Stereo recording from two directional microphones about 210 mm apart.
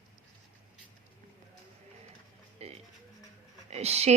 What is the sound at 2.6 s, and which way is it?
Music, 30° right (ahead or behind).